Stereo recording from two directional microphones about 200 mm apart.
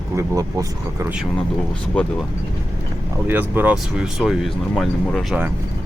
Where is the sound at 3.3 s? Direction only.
10° right (ahead or behind).